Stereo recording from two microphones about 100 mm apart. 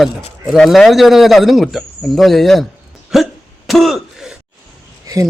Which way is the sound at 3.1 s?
Centre (ahead or behind).